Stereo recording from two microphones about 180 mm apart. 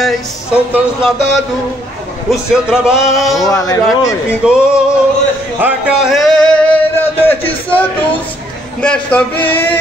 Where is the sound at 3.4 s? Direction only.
15° left (ahead or behind).